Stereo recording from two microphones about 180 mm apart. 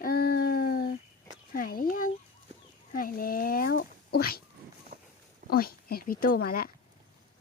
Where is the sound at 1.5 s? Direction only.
50° left (ahead or behind).